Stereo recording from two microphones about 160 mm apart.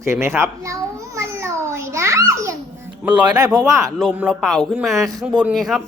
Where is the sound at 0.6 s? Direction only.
20° right (ahead or behind).